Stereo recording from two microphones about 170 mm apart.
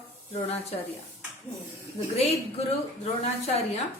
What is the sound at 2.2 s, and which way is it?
A woman's voice, 35° left (ahead or behind).